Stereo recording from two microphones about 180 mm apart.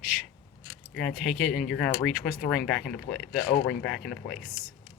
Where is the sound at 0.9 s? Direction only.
Centre (ahead or behind).